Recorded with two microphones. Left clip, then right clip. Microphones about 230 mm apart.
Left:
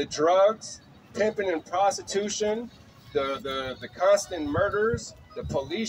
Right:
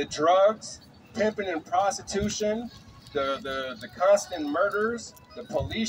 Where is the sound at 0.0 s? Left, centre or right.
Centre.